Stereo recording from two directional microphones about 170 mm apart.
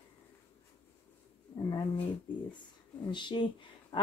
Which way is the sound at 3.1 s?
25° left (ahead or behind).